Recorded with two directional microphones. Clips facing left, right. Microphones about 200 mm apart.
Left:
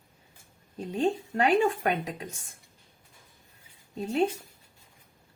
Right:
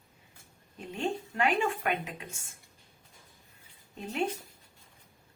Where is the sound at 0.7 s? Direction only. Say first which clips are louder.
Left 6 dB; 35° left (ahead or behind).